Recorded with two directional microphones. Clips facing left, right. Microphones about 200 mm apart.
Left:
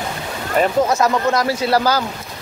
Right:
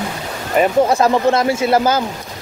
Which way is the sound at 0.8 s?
30° right (ahead or behind).